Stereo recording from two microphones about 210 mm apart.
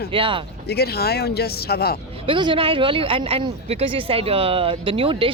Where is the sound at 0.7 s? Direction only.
50° left (ahead or behind).